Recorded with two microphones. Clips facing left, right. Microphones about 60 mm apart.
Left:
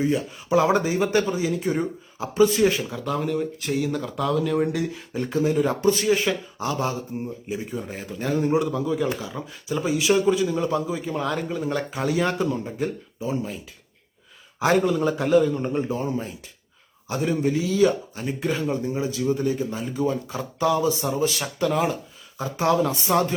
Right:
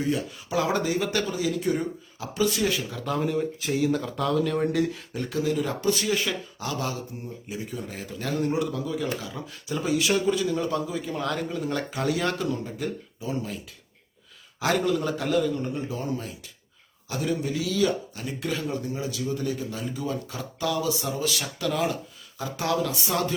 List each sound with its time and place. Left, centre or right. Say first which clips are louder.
0.0 s speech: left 4 dB; left
3.0 s speech: even; centre
5.1 s a man's voice: left 6 dB; left
14.6 s speech: left 4 dB; left